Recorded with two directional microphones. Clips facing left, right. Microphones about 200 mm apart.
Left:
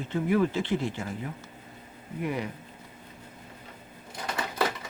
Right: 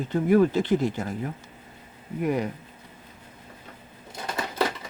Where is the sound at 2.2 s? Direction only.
45° right (ahead or behind).